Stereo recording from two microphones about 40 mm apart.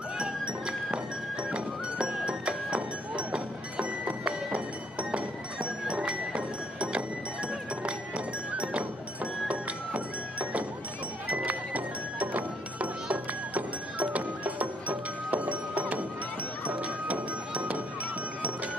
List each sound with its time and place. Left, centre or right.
0.2 s music: right
8.5 s music: right